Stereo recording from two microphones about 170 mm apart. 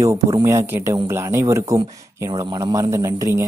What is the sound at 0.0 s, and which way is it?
Speech, 20° right (ahead or behind).